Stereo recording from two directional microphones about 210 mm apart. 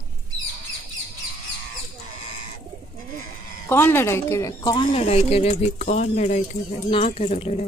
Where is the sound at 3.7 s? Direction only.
10° left (ahead or behind); by 7.6 s 30° left (ahead or behind).